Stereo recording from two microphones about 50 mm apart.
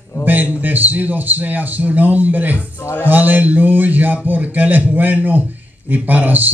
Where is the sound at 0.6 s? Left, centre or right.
Right.